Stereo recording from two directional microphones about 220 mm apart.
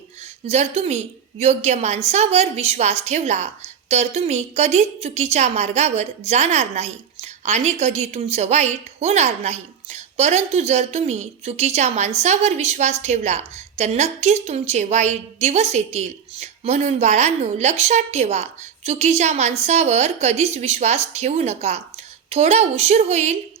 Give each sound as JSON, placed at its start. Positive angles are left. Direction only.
{"t": 0.4, "sound": "a woman's voice", "side_deg": -30}